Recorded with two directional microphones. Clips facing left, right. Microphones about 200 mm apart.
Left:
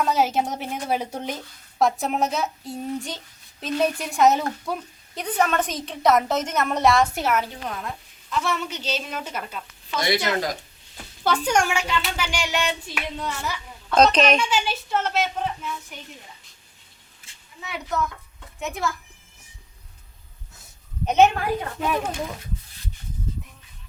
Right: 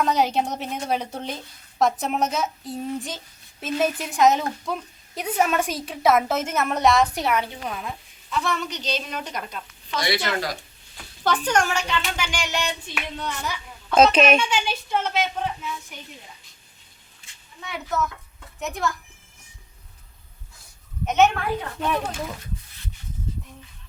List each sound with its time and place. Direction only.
0.0 s a woman's voice: 5° left (ahead or behind)
1.8 s a woman's voice: centre (ahead or behind)
5.2 s a woman's voice: 5° right (ahead or behind)
11.2 s a woman's voice: 10° left (ahead or behind)
13.9 s a woman's voice: 5° right (ahead or behind)
17.6 s a woman's voice: centre (ahead or behind)
21.1 s a woman's voice: 35° left (ahead or behind)
21.8 s a woman's voice: 5° left (ahead or behind)